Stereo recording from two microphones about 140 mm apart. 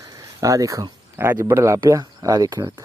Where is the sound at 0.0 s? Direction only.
25° right (ahead or behind).